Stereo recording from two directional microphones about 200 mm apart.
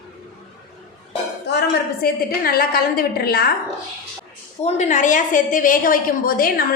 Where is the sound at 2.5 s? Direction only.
45° left (ahead or behind).